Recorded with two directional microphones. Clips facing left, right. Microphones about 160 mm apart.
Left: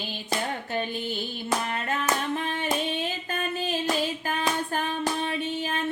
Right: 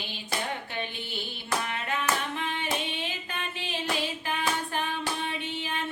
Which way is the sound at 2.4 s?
45° left (ahead or behind).